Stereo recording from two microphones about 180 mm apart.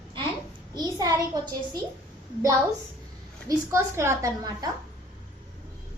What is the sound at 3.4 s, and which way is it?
A woman's voice, 15° right (ahead or behind).